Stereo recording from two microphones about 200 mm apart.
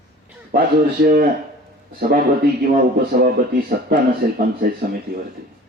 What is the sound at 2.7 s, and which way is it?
A man's voice, 45° right (ahead or behind).